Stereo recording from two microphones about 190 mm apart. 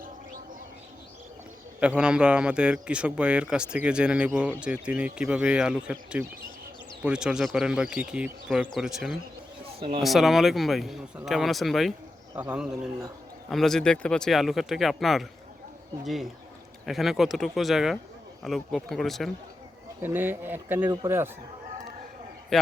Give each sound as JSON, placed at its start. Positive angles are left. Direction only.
{"t": 1.8, "sound": "a man's voice", "side_deg": -5}
{"t": 20.0, "sound": "speech", "side_deg": -10}
{"t": 22.5, "sound": "a man's voice", "side_deg": 0}